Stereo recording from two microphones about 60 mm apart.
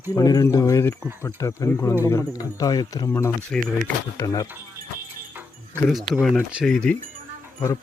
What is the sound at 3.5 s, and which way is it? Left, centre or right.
Speech, centre.